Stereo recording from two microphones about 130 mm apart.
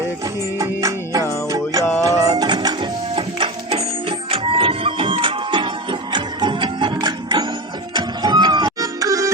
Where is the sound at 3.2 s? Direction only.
45° right (ahead or behind).